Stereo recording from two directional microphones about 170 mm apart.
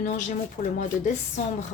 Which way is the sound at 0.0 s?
45° left (ahead or behind).